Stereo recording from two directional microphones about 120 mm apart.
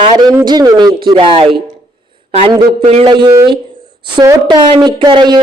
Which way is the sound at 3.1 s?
40° right (ahead or behind).